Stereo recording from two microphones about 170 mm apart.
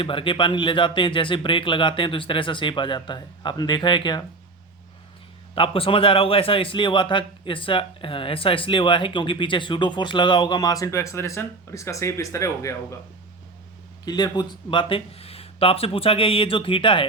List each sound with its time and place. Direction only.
0.0 s a man's voice: 30° left (ahead or behind)
5.5 s a man's voice: 30° left (ahead or behind)
14.0 s speech: 25° left (ahead or behind)